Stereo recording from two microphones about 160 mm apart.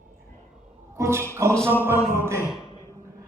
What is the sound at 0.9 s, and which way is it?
Dog, 15° right (ahead or behind).